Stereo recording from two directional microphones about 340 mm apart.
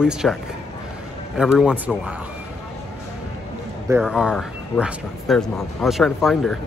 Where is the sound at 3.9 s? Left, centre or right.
Centre.